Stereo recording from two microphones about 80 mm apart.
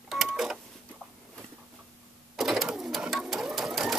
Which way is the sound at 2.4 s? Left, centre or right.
Centre.